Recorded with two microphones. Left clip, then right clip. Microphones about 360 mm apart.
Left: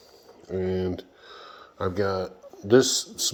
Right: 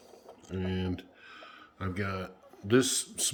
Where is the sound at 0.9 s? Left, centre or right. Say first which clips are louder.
Left 5 dB; centre.